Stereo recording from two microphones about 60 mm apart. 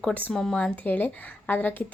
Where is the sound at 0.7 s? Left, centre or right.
Left.